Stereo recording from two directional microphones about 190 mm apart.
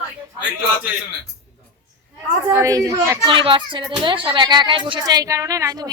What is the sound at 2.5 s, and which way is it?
A woman's voice, 15° right (ahead or behind).